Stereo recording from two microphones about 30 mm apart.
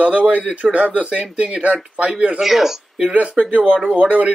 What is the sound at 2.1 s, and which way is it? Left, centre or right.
Speech, right.